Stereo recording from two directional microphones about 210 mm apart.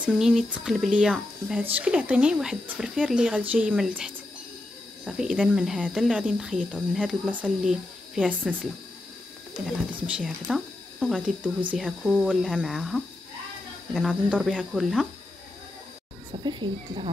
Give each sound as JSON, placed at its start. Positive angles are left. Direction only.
{"t": 0.0, "sound": "speech", "side_deg": 0}
{"t": 9.7, "sound": "speech", "side_deg": -5}
{"t": 16.4, "sound": "a woman's voice", "side_deg": -20}